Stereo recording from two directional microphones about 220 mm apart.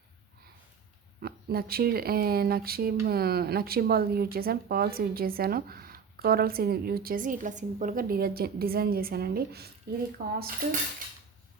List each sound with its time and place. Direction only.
1.2 s speech: 45° right (ahead or behind)
10.2 s cutlery: 40° right (ahead or behind)